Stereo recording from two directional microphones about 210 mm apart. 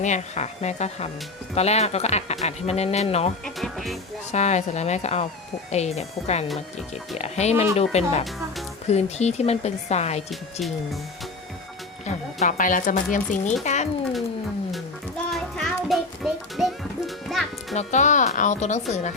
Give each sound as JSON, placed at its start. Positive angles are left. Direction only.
{"t": 0.0, "sound": "speech", "side_deg": 35}
{"t": 3.4, "sound": "music", "side_deg": 0}
{"t": 4.3, "sound": "speech", "side_deg": 35}
{"t": 10.2, "sound": "speech", "side_deg": 0}
{"t": 12.0, "sound": "speech", "side_deg": 35}
{"t": 15.3, "sound": "music", "side_deg": 0}
{"t": 17.7, "sound": "speech", "side_deg": 35}